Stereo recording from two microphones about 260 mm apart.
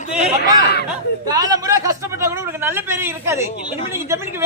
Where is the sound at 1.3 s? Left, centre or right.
Centre.